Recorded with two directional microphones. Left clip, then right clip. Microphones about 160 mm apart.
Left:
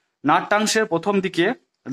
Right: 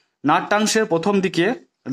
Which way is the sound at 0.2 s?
30° right (ahead or behind).